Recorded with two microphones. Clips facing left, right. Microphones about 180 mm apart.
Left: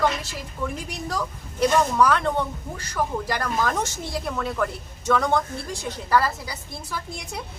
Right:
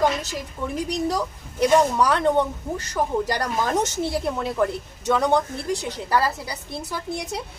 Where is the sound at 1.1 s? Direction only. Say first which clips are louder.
Right 4 dB; 15° right (ahead or behind).